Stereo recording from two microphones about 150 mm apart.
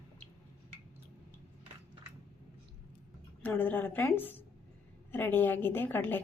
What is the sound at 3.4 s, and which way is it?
A woman's voice, 10° left (ahead or behind).